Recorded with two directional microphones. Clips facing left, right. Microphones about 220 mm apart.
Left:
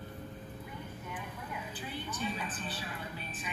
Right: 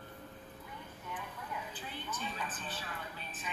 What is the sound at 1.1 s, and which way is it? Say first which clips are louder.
Vehicle: right 1 dB; 10° left (ahead or behind).